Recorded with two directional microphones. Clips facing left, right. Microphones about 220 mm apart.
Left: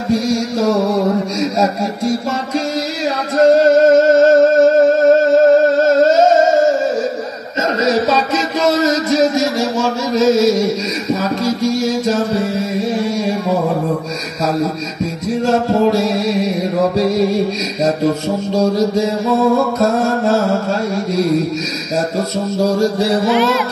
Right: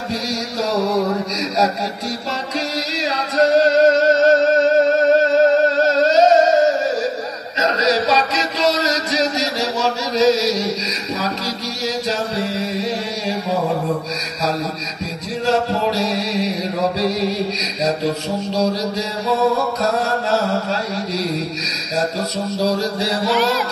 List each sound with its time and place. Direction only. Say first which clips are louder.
0.1 s music: left 10 dB; 50° left (ahead or behind)
1.4 s speech: left 4 dB; 50° left (ahead or behind)
3.3 s music: left 4 dB; 50° left (ahead or behind)
7.8 s a sound: left 3 dB; 50° left (ahead or behind)
15.4 s music: left 5 dB; 50° left (ahead or behind)
22.6 s music: left 6 dB; 50° left (ahead or behind)